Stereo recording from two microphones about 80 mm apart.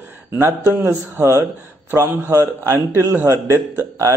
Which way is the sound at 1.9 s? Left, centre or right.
Right.